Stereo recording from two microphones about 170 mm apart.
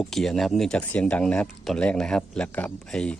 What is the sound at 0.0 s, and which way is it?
Speech, centre (ahead or behind).